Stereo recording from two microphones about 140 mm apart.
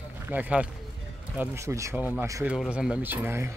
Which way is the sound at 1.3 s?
20° right (ahead or behind).